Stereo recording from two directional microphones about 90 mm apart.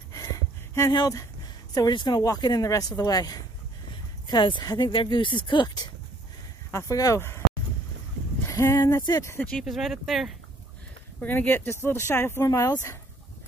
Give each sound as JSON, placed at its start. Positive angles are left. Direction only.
{"t": 0.9, "sound": "speech", "side_deg": 45}
{"t": 2.6, "sound": "speech", "side_deg": 35}
{"t": 4.3, "sound": "speech", "side_deg": 55}
{"t": 4.9, "sound": "speech", "side_deg": 65}
{"t": 6.7, "sound": "speech", "side_deg": 35}
{"t": 7.2, "sound": "speech", "side_deg": 30}
{"t": 8.5, "sound": "speech", "side_deg": 35}
{"t": 9.4, "sound": "speech", "side_deg": 5}
{"t": 11.1, "sound": "speech", "side_deg": 20}
{"t": 12.4, "sound": "speech", "side_deg": 40}